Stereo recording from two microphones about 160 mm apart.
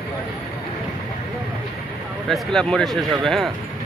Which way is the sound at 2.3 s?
Centre (ahead or behind).